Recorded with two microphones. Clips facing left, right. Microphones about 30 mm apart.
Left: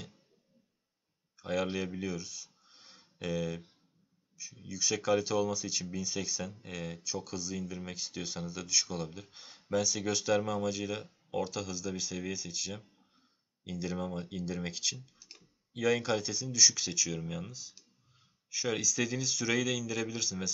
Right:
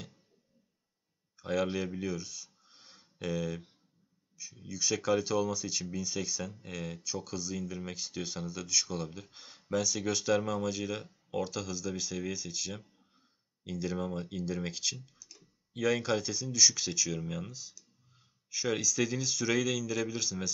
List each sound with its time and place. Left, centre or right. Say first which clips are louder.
1.3 s speech: right 1 dB; centre
15.1 s clicking: left 1 dB; left
15.7 s speech: even; centre